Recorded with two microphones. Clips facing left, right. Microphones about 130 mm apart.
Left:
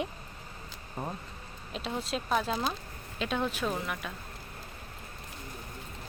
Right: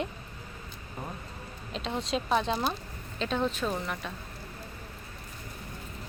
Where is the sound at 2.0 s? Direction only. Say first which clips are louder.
Right 3 dB; centre (ahead or behind).